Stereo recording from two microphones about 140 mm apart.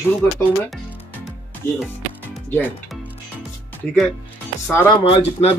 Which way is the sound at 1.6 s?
15° left (ahead or behind).